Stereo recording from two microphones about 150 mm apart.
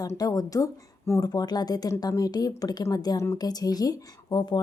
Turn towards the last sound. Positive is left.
turn(degrees=30)  # may be behind; listen again after turning